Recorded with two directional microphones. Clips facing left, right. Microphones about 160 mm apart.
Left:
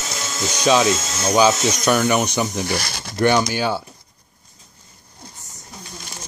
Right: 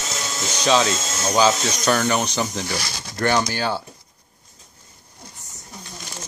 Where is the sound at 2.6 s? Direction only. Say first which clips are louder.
Left 4 dB; 60° left (ahead or behind).